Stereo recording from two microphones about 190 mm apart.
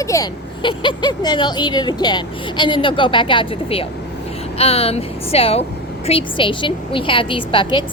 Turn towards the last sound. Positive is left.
turn(degrees=25)  # may be behind; listen again after turning